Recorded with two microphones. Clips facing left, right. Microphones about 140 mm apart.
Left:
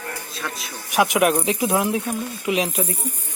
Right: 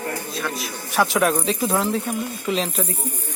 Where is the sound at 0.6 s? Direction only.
15° left (ahead or behind).